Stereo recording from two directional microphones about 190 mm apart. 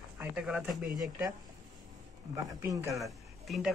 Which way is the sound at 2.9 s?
Centre (ahead or behind).